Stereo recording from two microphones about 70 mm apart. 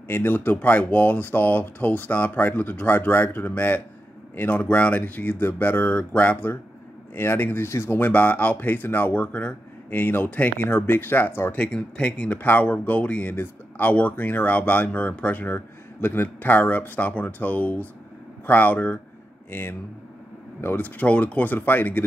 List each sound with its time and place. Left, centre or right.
0.1 s speech: left
8.0 s speech: left
11.5 s speech: centre